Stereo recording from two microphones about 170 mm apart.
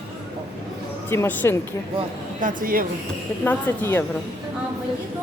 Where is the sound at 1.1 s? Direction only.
15° left (ahead or behind).